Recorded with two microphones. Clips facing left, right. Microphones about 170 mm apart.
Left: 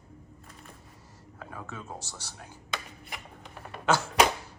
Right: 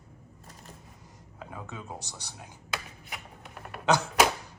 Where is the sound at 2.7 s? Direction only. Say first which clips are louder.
Even; 5° right (ahead or behind).